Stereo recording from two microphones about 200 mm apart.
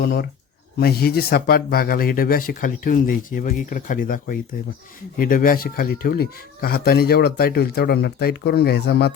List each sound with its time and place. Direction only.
0.0 s speech: 55° left (ahead or behind)